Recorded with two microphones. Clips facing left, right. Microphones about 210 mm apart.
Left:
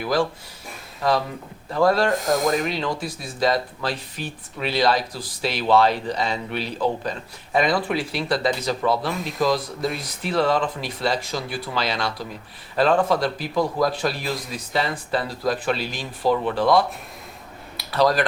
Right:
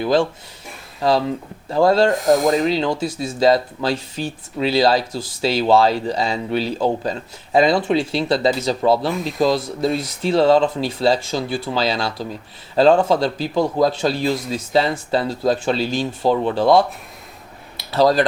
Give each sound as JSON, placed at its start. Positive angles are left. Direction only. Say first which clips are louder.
{"t": 0.0, "sound": "speech", "louder": "right 5 dB", "side_deg": -25}
{"t": 1.7, "sound": "speech", "louder": "right 4 dB", "side_deg": -25}